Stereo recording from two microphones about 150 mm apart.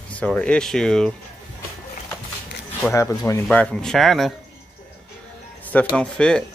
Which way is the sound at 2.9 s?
20° left (ahead or behind).